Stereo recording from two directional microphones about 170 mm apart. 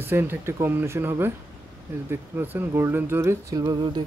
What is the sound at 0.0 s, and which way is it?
Speech, 15° right (ahead or behind).